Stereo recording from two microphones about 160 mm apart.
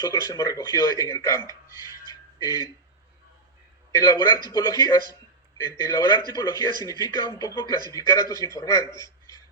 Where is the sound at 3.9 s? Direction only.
25° left (ahead or behind).